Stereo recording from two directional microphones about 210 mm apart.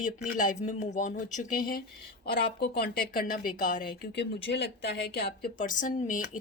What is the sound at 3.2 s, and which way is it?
Speech, 40° left (ahead or behind).